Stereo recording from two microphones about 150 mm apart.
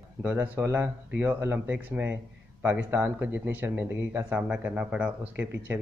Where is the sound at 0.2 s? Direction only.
15° right (ahead or behind).